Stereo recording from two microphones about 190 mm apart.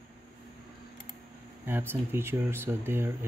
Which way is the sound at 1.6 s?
10° right (ahead or behind).